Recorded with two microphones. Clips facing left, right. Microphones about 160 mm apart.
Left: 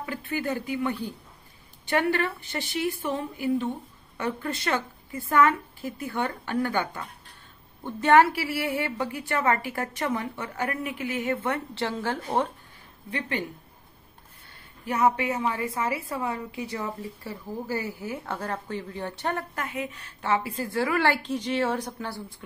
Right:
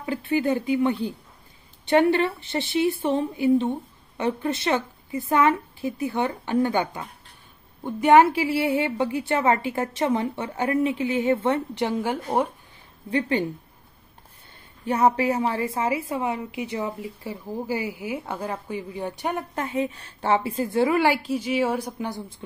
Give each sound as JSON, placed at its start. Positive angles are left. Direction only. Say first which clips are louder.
{"t": 0.0, "sound": "a woman's voice", "louder": "right 7 dB", "side_deg": -25}
{"t": 13.1, "sound": "a woman's voice", "louder": "right 7 dB", "side_deg": -30}
{"t": 14.9, "sound": "a woman's voice", "louder": "right 3 dB", "side_deg": -35}
{"t": 15.6, "sound": "a woman's voice", "louder": "right 4 dB", "side_deg": -20}
{"t": 19.5, "sound": "a woman's voice", "louder": "right 6 dB", "side_deg": -30}